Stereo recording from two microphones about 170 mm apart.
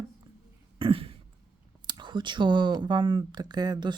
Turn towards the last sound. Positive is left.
turn(degrees=-25)  # may be behind; listen again after turning